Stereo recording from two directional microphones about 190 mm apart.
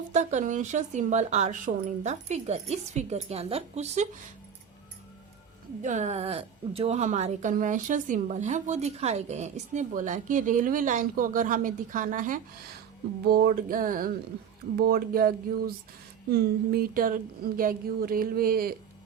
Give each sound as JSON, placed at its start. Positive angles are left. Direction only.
{"t": 0.1, "sound": "speech", "side_deg": -40}
{"t": 5.8, "sound": "speech", "side_deg": -40}